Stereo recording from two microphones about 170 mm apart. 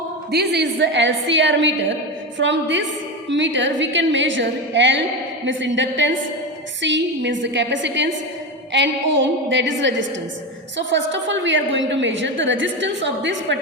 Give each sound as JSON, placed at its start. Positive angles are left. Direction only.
{"t": 0.3, "sound": "a woman's voice", "side_deg": -75}